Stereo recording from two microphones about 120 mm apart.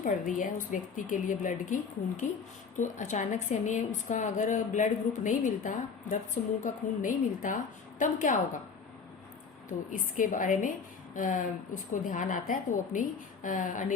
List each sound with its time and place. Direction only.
0.0 s a woman's voice: 90° left
9.6 s a woman's voice: 90° left